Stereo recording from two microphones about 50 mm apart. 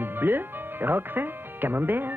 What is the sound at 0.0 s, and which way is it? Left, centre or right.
Speech, right.